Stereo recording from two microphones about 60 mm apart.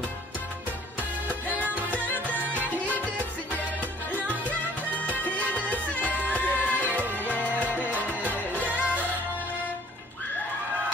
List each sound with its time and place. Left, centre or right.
1.5 s music: right
1.9 s music: left
2.5 s music: right
4.5 s music: left
8.6 s music: right